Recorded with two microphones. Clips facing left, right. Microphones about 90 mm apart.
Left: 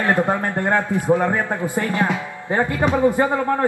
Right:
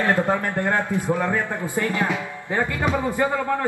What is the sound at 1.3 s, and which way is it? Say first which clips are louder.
Speech: left 3 dB; 50° left (ahead or behind).